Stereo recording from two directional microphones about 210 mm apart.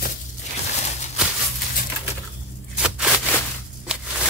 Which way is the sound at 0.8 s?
30° left (ahead or behind).